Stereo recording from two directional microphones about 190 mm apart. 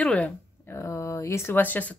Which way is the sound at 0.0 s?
5° left (ahead or behind).